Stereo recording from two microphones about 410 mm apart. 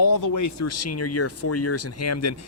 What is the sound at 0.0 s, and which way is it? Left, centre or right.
Speech, left.